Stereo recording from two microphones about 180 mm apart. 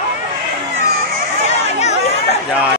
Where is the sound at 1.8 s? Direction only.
40° left (ahead or behind).